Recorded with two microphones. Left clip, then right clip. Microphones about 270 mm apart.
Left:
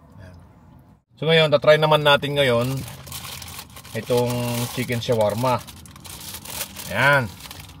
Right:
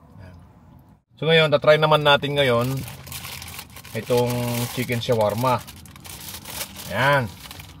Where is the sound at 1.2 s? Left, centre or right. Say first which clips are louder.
Even; centre.